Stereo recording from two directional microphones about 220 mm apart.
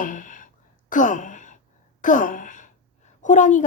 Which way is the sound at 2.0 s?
35° left (ahead or behind).